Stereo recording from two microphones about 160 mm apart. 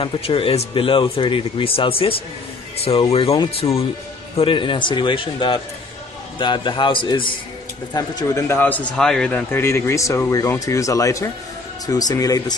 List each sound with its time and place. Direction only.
0.0 s speech: 35° left (ahead or behind)